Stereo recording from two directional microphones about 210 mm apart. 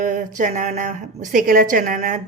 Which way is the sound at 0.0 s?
35° right (ahead or behind).